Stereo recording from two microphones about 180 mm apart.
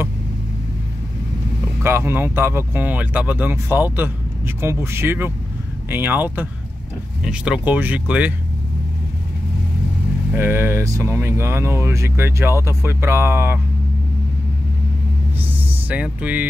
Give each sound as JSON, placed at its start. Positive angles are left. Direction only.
{"t": 1.8, "sound": "speech", "side_deg": -15}
{"t": 10.3, "sound": "speech", "side_deg": -10}
{"t": 15.3, "sound": "music", "side_deg": -10}